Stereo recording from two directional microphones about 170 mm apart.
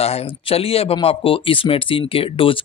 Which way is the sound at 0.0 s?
35° left (ahead or behind).